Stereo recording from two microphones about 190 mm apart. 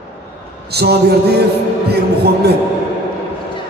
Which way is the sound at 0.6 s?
60° right (ahead or behind).